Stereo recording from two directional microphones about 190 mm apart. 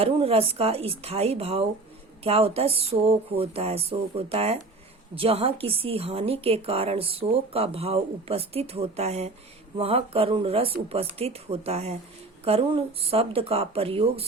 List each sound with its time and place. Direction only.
0.0 s a woman's voice: 30° right (ahead or behind)